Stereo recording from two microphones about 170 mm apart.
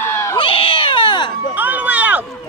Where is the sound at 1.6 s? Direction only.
10° right (ahead or behind).